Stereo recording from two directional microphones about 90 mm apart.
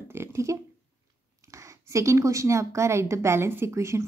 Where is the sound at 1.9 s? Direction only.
35° right (ahead or behind).